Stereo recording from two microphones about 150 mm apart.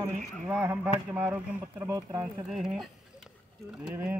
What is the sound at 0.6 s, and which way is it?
A man's voice, 10° right (ahead or behind).